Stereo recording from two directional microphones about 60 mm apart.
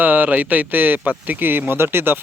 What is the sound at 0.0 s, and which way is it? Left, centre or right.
Speech, right.